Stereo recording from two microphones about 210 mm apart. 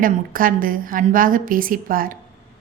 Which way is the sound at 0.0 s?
40° right (ahead or behind).